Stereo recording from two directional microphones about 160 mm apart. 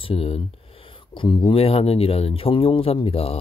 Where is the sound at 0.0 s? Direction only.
35° left (ahead or behind).